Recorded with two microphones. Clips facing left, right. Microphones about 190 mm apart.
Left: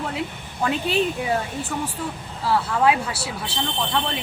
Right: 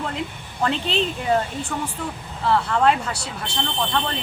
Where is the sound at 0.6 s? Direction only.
10° left (ahead or behind).